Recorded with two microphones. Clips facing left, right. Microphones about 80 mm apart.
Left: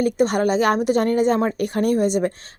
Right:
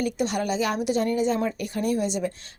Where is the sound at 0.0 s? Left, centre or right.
Left.